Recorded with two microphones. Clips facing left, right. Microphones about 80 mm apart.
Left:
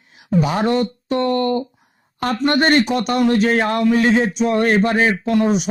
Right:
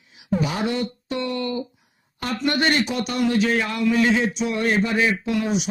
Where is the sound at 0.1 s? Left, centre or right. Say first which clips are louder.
Left 5 dB; left.